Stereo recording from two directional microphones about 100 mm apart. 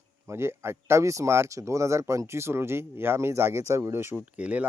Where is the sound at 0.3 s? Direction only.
25° right (ahead or behind).